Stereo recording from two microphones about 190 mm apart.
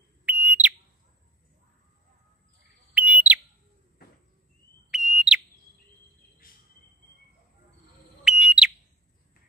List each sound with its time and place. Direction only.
0.2 s fire alarm: 10° right (ahead or behind)
2.9 s bird: 10° right (ahead or behind)
4.9 s fire alarm: 5° right (ahead or behind)
8.2 s bird: 5° right (ahead or behind)